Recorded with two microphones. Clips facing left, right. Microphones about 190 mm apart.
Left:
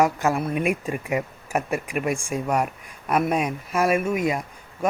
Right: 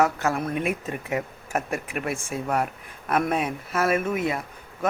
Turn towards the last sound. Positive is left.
turn(degrees=15)  # may be behind; listen again after turning